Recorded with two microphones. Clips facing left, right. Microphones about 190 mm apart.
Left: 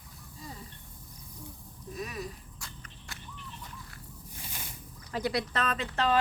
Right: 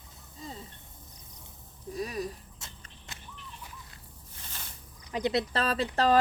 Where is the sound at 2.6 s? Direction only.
25° right (ahead or behind).